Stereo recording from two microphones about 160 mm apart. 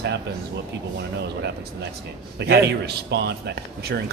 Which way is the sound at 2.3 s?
90° right.